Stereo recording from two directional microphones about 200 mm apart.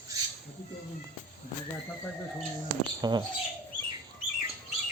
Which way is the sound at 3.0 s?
20° right (ahead or behind).